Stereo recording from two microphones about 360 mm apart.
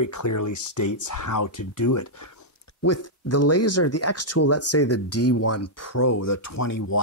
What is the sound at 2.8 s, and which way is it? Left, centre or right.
Speech, left.